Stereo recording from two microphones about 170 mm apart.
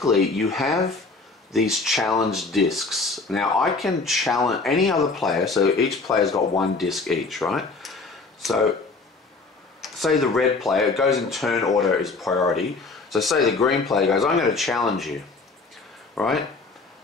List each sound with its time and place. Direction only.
0.1 s speech: centre (ahead or behind)
6.0 s speech: 20° left (ahead or behind)
6.8 s speech: centre (ahead or behind)
9.8 s speech: centre (ahead or behind)
11.5 s speech: 20° left (ahead or behind)
11.8 s speech: centre (ahead or behind)
16.2 s speech: centre (ahead or behind)